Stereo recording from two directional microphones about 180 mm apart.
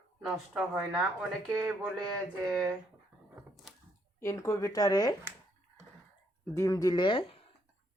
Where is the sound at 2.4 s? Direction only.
5° left (ahead or behind).